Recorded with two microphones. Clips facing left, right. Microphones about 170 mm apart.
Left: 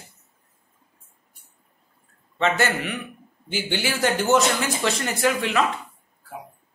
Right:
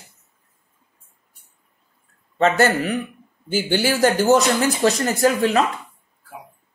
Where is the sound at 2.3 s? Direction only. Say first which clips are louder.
Right 5 dB; 40° right (ahead or behind).